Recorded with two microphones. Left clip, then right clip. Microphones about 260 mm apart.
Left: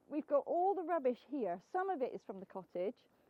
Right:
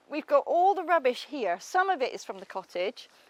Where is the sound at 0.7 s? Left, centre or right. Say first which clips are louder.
Right 11 dB; centre.